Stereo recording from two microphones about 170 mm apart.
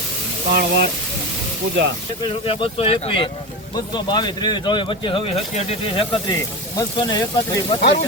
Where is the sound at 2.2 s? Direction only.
30° left (ahead or behind).